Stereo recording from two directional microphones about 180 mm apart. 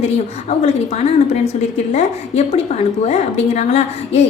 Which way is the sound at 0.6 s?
40° left (ahead or behind).